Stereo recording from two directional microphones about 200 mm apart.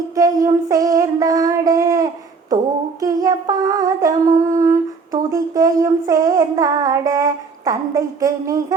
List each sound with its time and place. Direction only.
0.2 s child singing: 15° right (ahead or behind)
3.0 s humming: 20° right (ahead or behind)
5.3 s child singing: 15° right (ahead or behind)